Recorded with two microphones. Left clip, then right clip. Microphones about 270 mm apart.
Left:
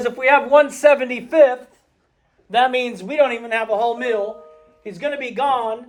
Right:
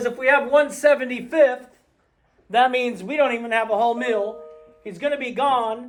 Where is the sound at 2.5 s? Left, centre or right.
Centre.